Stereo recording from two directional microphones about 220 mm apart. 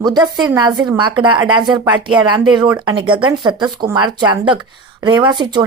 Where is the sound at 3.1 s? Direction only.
20° right (ahead or behind).